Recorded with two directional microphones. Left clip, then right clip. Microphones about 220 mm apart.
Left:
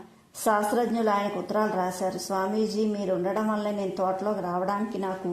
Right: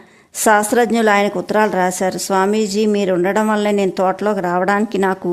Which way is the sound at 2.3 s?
40° right (ahead or behind).